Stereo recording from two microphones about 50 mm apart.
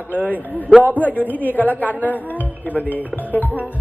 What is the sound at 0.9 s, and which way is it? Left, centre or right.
Speech, left.